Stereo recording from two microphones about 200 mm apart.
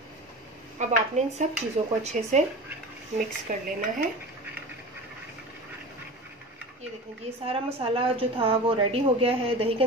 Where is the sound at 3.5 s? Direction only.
40° right (ahead or behind).